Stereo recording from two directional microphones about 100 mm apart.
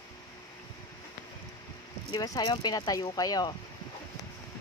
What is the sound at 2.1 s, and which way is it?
Speech, 40° left (ahead or behind).